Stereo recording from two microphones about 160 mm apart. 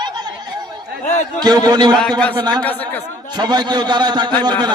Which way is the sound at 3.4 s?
25° right (ahead or behind).